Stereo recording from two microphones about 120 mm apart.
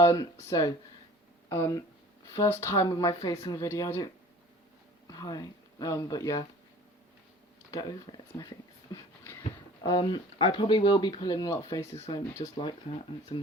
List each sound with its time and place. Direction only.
0.0 s speech: 25° left (ahead or behind)
5.0 s speech: 35° left (ahead or behind)
7.7 s speech: 30° left (ahead or behind)
9.2 s a sound: 20° left (ahead or behind)
9.8 s speech: 35° left (ahead or behind)
12.5 s speech: 45° left (ahead or behind)